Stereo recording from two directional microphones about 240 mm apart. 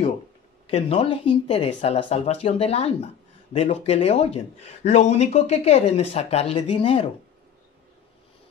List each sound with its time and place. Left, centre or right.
0.7 s speech: left